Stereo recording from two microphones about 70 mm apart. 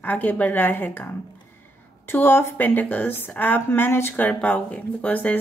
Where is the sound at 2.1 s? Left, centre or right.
Left.